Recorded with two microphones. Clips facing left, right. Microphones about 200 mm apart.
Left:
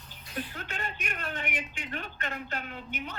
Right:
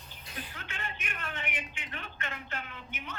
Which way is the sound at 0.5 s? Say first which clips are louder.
Left 4 dB; 40° left (ahead or behind).